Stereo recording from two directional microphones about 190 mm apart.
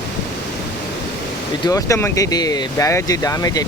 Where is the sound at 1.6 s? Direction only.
15° left (ahead or behind).